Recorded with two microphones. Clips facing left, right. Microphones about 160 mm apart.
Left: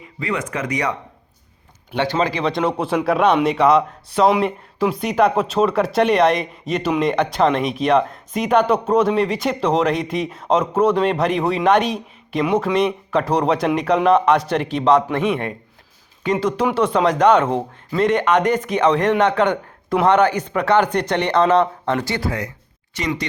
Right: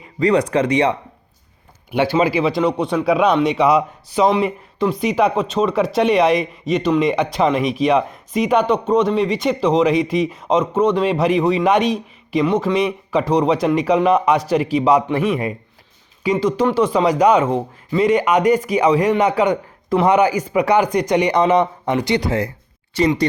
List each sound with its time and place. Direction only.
0.2 s speech: 35° right (ahead or behind)
1.9 s a man's voice: 10° right (ahead or behind)
23.0 s speech: 30° right (ahead or behind)